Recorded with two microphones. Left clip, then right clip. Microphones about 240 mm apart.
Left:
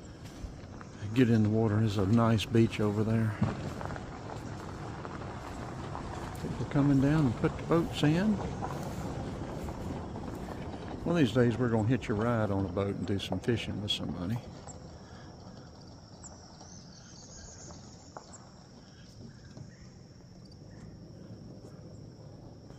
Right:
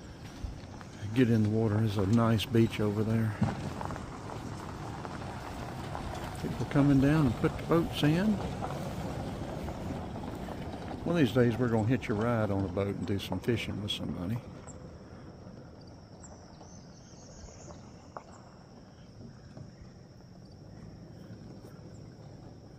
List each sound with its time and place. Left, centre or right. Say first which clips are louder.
1.1 s speech: left 1 dB; centre
3.3 s vehicle: right 1 dB; right
6.7 s speech: right 2 dB; centre
8.4 s vehicle: even; right
11.1 s speech: even; centre